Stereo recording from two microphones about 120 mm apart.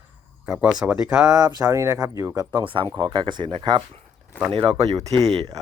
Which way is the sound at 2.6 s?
45° right (ahead or behind).